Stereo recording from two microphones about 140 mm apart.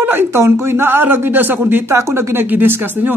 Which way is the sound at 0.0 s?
15° right (ahead or behind).